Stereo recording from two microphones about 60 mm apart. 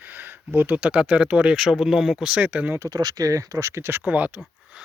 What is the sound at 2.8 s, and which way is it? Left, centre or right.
Speech, right.